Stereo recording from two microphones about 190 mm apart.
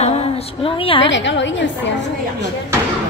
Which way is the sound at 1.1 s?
70° left (ahead or behind).